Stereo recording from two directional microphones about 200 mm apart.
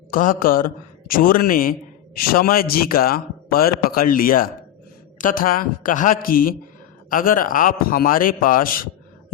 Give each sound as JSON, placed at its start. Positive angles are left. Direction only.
{"t": 0.1, "sound": "speech", "side_deg": 45}